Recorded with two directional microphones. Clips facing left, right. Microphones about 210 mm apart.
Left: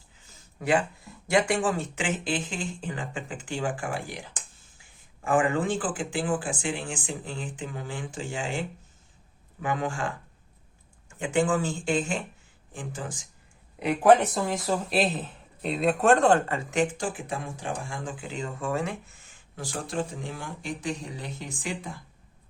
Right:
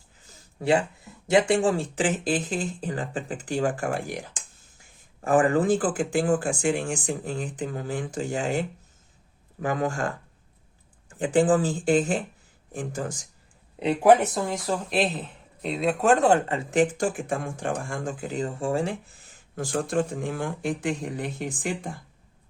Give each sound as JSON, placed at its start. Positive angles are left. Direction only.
{"t": 0.3, "sound": "speech", "side_deg": -30}
{"t": 14.3, "sound": "speech", "side_deg": 0}
{"t": 17.0, "sound": "speech", "side_deg": -50}